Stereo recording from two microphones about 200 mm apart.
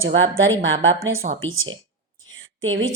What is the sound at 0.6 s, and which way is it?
A woman's voice, 75° right (ahead or behind).